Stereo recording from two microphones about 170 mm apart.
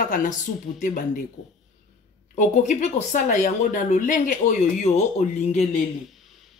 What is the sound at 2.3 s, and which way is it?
Speech, 50° left (ahead or behind).